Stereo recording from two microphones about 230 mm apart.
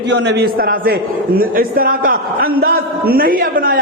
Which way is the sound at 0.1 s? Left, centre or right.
Right.